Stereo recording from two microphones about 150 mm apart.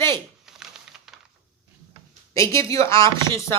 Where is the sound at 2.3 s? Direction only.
20° left (ahead or behind).